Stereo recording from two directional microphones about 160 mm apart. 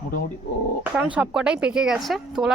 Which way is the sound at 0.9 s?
5° right (ahead or behind).